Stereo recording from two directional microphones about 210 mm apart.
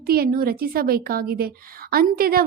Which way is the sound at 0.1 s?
45° right (ahead or behind).